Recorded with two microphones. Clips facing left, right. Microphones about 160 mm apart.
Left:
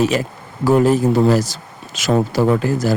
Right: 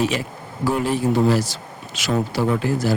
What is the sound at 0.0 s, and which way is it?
Speech, 45° left (ahead or behind).